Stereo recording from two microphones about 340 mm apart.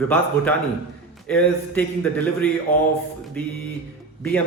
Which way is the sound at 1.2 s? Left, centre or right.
Centre.